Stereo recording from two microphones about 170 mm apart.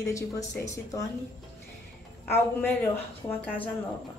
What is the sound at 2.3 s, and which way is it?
Speech, 10° left (ahead or behind).